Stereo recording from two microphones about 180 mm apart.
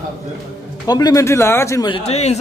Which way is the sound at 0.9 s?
20° left (ahead or behind).